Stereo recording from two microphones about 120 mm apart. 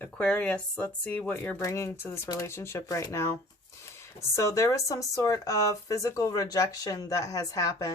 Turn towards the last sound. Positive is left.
turn(degrees=30)  # may be behind; listen again after turning